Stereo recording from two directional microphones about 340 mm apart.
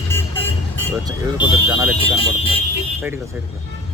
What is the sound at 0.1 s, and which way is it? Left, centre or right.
Vehicle, centre.